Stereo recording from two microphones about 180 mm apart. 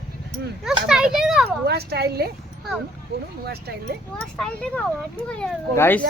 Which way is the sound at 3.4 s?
60° right (ahead or behind).